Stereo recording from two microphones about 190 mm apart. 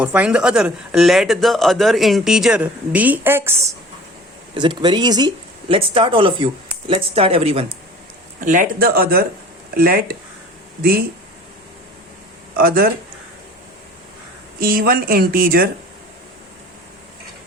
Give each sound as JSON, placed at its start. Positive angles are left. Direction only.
{"t": 0.0, "sound": "speech", "side_deg": -5}
{"t": 4.5, "sound": "speech", "side_deg": -25}
{"t": 8.4, "sound": "speech", "side_deg": -45}
{"t": 12.5, "sound": "speech", "side_deg": -50}
{"t": 14.6, "sound": "speech", "side_deg": -50}